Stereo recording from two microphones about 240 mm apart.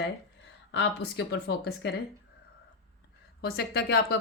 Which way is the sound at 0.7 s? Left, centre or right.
Left.